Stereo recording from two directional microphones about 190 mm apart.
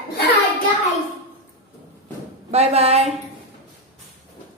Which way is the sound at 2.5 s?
35° right (ahead or behind).